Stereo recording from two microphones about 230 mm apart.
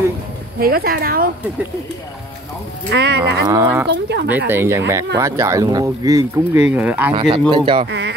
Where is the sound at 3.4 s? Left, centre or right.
Centre.